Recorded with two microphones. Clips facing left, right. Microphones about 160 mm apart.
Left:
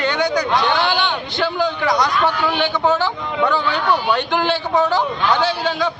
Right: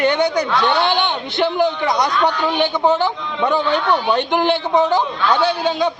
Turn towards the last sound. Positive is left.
turn(degrees=-20)  # may be behind; listen again after turning